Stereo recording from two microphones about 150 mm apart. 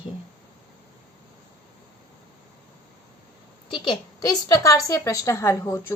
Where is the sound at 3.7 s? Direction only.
30° left (ahead or behind).